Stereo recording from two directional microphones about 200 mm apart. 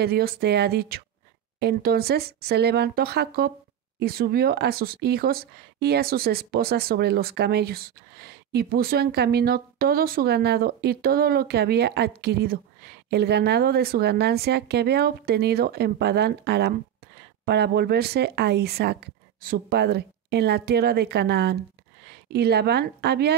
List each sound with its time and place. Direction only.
0.0 s speech: 50° right (ahead or behind)